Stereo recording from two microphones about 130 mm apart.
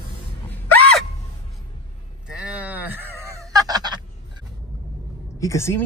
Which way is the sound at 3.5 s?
30° right (ahead or behind).